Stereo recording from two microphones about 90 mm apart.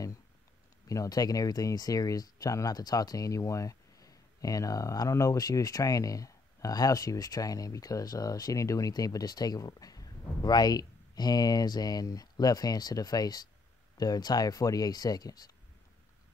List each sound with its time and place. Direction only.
0.8 s speech: 40° left (ahead or behind)